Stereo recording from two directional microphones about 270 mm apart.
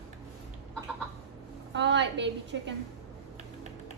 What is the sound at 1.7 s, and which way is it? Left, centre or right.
A woman's voice, right.